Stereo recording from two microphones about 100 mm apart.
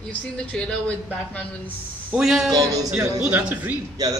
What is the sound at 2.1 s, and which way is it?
Speech, 5° right (ahead or behind).